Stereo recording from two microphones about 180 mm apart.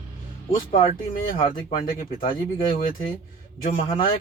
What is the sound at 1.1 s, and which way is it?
Speech, 50° left (ahead or behind).